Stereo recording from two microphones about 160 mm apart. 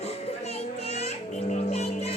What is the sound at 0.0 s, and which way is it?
Music, 40° left (ahead or behind).